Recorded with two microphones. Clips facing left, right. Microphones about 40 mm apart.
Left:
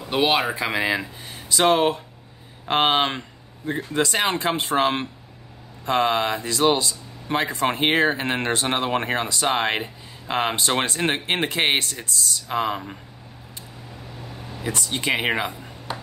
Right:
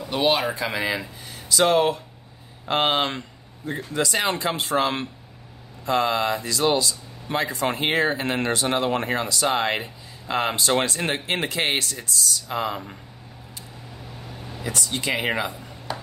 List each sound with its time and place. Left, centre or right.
0.3 s speech: left
0.8 s speech: left
14.6 s speech: left